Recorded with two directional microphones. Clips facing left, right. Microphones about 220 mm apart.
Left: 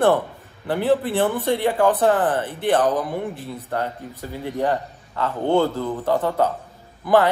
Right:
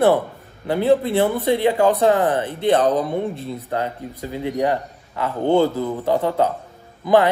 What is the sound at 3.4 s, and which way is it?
A man's voice, 15° right (ahead or behind).